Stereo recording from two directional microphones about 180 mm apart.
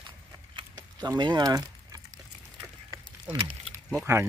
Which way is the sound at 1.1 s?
25° right (ahead or behind).